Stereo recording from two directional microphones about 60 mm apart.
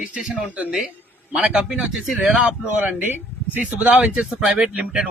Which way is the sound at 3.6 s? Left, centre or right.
Right.